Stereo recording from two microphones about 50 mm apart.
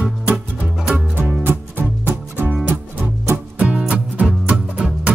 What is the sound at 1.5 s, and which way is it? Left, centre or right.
Music, right.